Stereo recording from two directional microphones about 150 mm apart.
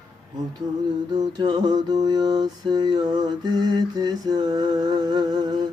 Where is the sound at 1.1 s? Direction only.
30° right (ahead or behind).